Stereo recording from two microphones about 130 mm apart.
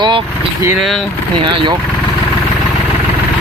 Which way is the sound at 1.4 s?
35° right (ahead or behind).